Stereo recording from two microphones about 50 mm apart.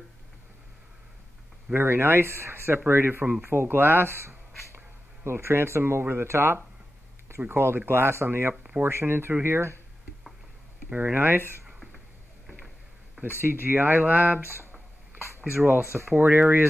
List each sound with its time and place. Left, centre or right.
1.7 s speech: right
10.9 s speech: right
11.1 s speech: right
13.2 s speech: right
15.6 s speech: right